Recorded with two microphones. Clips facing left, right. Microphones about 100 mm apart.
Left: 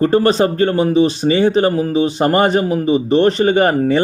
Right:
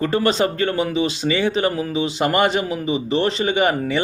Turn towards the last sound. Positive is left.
turn(degrees=40)  # may be behind; listen again after turning